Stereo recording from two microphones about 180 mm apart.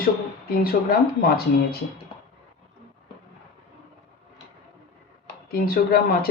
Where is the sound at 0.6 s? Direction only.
55° left (ahead or behind).